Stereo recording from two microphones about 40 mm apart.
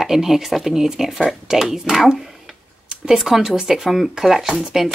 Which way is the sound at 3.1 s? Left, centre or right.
Centre.